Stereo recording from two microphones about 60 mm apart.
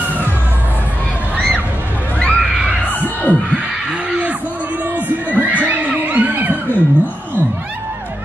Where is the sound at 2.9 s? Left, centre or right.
Left.